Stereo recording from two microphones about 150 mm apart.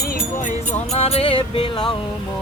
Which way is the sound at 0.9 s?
40° left (ahead or behind).